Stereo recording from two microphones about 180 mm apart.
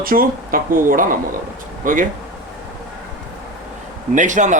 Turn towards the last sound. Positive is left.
turn(degrees=-45)  # may be behind; listen again after turning